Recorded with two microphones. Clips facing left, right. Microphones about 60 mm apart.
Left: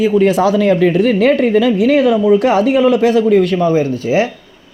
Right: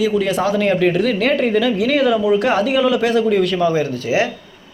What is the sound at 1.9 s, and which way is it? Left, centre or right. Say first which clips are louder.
Speech: left 2 dB; right.